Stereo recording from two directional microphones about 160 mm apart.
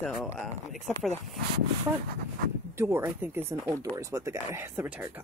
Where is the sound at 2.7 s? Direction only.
15° right (ahead or behind).